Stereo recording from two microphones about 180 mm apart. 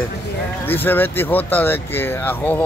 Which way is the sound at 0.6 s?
10° left (ahead or behind).